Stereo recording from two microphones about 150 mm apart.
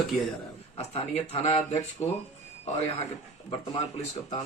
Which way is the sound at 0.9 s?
40° left (ahead or behind).